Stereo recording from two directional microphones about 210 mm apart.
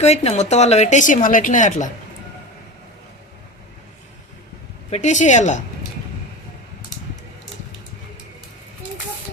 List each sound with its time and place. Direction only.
0.0 s a woman's voice: 30° left (ahead or behind)
4.9 s a woman's voice: 35° left (ahead or behind)